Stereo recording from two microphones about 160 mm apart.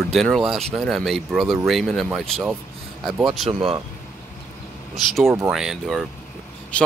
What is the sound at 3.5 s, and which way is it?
Speech, 30° right (ahead or behind).